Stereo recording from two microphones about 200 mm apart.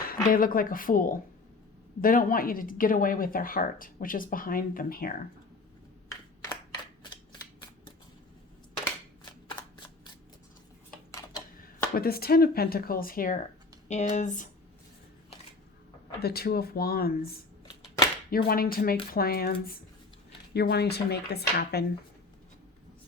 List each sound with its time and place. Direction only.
0.0 s speech: 45° left (ahead or behind)
11.5 s speech: 45° left (ahead or behind)
16.2 s speech: 50° left (ahead or behind)